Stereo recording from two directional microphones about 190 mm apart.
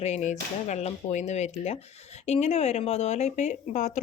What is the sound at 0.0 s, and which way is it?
Speech, 35° left (ahead or behind).